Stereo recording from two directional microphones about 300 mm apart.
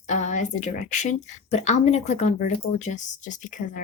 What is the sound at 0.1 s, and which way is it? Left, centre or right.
A woman's voice, left.